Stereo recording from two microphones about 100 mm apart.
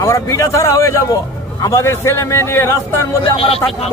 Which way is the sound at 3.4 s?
75° left (ahead or behind).